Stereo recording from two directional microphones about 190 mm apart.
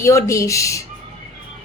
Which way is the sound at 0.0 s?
15° left (ahead or behind).